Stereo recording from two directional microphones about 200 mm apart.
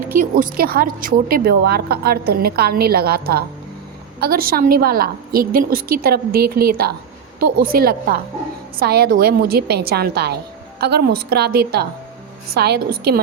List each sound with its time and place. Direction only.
0.2 s a woman's voice: 45° right (ahead or behind)